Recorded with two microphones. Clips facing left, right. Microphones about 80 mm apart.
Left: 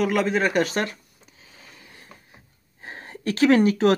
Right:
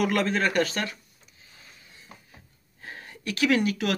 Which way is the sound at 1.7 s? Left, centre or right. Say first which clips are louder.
Left 5 dB; left.